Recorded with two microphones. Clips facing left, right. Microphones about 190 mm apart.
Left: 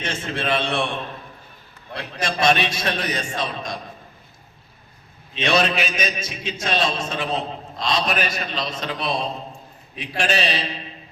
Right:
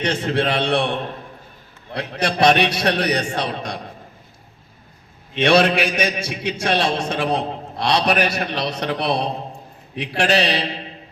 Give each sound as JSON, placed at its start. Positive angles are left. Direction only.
{"t": 0.0, "sound": "a man's voice", "side_deg": -65}
{"t": 5.3, "sound": "a man's voice", "side_deg": -70}